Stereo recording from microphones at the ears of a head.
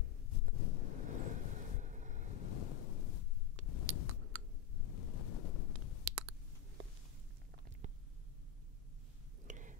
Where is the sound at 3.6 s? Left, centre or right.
Left.